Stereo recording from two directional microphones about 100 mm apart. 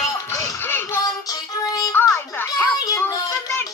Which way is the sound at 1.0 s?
40° left (ahead or behind).